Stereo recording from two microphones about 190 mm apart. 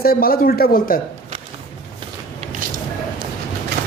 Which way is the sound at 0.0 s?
50° left (ahead or behind).